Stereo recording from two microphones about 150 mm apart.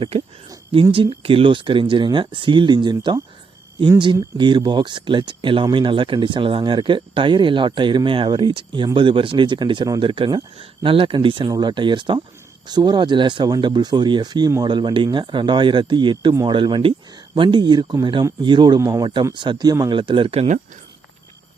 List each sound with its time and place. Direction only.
0.7 s speech: 35° right (ahead or behind)